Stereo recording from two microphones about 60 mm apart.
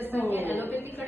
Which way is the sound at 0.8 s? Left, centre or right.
Right.